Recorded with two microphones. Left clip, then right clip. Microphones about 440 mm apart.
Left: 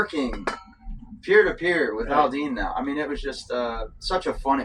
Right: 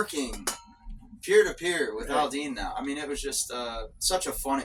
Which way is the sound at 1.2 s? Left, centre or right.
Right.